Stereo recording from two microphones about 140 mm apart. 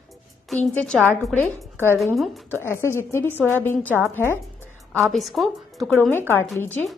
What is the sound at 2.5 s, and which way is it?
A woman's voice, 15° left (ahead or behind).